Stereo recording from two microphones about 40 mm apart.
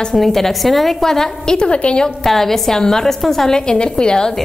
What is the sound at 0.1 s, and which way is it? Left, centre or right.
A woman's voice, centre.